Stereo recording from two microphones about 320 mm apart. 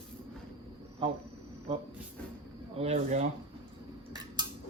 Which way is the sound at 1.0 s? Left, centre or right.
Centre.